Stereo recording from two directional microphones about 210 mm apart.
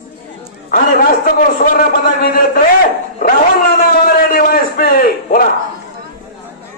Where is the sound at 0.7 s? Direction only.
40° left (ahead or behind).